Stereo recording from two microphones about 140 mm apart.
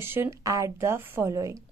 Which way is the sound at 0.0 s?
15° right (ahead or behind).